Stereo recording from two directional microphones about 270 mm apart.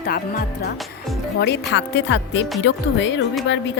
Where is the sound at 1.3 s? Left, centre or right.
Left.